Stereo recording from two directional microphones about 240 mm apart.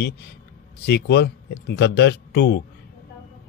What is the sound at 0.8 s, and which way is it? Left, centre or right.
Speech, left.